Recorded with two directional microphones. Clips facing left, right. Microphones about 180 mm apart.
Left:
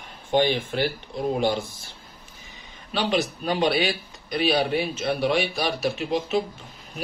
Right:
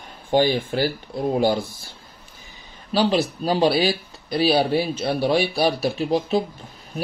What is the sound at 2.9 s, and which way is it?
Speech, 35° right (ahead or behind).